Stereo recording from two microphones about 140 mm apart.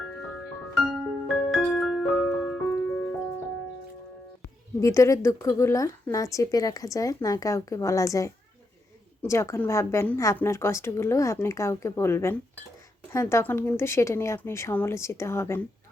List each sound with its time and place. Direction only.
0.8 s music: centre (ahead or behind)
4.8 s a woman's voice: 20° left (ahead or behind)